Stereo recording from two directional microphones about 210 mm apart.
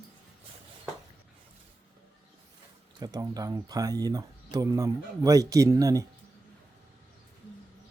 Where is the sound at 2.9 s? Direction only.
20° right (ahead or behind).